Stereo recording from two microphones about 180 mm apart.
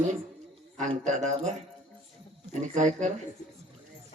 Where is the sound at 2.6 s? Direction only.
40° right (ahead or behind).